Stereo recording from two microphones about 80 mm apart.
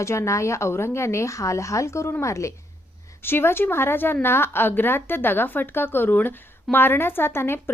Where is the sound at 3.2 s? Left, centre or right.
Left.